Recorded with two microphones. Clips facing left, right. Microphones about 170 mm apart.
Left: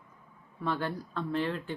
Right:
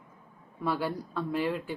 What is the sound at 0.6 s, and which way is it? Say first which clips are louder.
Speech: right 2 dB; 10° right (ahead or behind).